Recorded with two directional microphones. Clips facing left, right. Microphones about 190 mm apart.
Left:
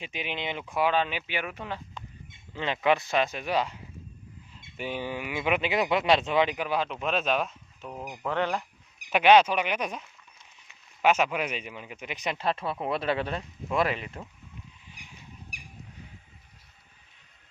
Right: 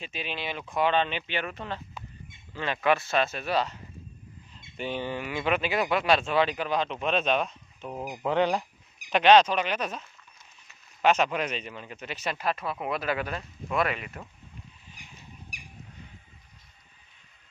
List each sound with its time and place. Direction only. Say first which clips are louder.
0.0 s speech: left 1 dB; 15° left (ahead or behind)
0.7 s speech: right 1 dB; 10° left (ahead or behind)
7.9 s speech: right 3 dB; 10° right (ahead or behind)
9.0 s speech: even; 10° left (ahead or behind)
12.4 s speech: left 2 dB; 30° left (ahead or behind)
13.7 s speech: left 1 dB; centre (ahead or behind)
13.9 s speech: left 2 dB; 30° left (ahead or behind)